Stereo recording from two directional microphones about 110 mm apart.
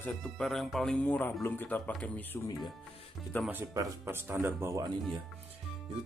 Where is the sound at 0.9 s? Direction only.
15° left (ahead or behind).